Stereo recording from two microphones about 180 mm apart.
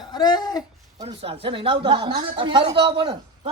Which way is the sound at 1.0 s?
30° right (ahead or behind).